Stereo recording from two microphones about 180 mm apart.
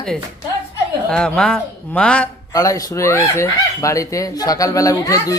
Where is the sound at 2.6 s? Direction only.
15° left (ahead or behind).